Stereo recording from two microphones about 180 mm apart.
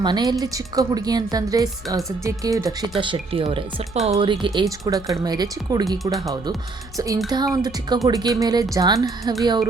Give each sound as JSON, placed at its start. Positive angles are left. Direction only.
{"t": 0.0, "sound": "speech", "side_deg": -25}
{"t": 3.0, "sound": "speech", "side_deg": -30}
{"t": 7.3, "sound": "speech", "side_deg": -20}